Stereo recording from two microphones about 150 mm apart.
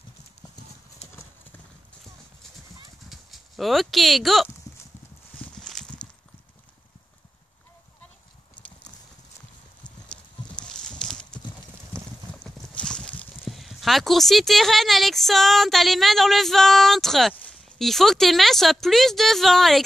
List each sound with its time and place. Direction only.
3.1 s speech: centre (ahead or behind)
5.6 s clip-clop: 5° left (ahead or behind)
10.6 s a sound: 5° left (ahead or behind)
11.9 s clip-clop: 15° right (ahead or behind)
12.7 s a sound: 5° left (ahead or behind)
13.4 s speech: centre (ahead or behind)